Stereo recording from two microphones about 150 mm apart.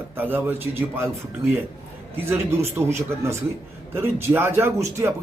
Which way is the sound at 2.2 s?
15° right (ahead or behind).